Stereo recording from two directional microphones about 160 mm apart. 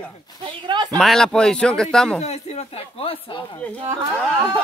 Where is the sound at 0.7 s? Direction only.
25° right (ahead or behind).